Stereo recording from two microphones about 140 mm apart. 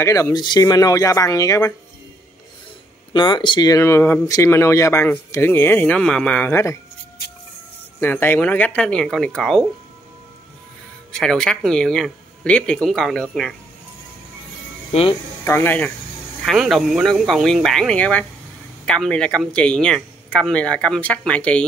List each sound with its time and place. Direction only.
0.0 s speech: 20° left (ahead or behind)
3.1 s speech: 35° left (ahead or behind)
8.0 s speech: 15° left (ahead or behind)
11.1 s speech: 5° left (ahead or behind)
14.9 s speech: 45° left (ahead or behind)
15.4 s speech: 15° left (ahead or behind)
16.4 s speech: centre (ahead or behind)